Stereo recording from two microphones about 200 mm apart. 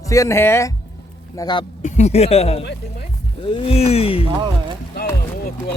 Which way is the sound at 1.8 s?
35° left (ahead or behind).